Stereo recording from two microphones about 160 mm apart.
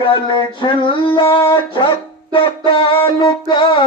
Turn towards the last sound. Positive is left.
turn(degrees=30)  # may be behind; listen again after turning